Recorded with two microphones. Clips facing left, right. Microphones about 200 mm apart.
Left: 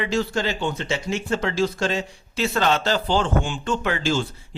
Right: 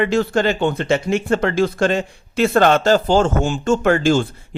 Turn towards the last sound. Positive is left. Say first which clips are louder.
# right 8 dB
turn(degrees=-50)  # may be behind; listen again after turning